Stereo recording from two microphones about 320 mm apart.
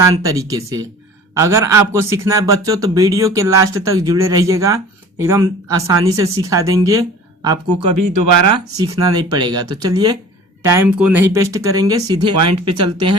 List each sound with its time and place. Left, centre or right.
0.0 s speech: centre
12.4 s speech: right